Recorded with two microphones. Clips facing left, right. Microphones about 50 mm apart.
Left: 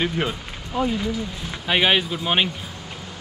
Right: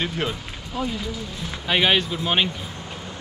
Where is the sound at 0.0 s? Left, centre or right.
Centre.